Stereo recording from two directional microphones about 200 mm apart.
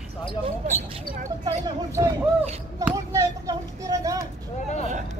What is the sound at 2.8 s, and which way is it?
Speech, 15° right (ahead or behind).